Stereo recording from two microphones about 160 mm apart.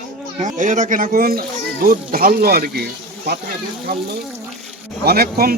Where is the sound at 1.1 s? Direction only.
70° right (ahead or behind).